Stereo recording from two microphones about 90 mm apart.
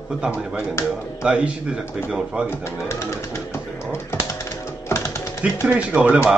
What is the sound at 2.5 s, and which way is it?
Pigeon, 30° left (ahead or behind).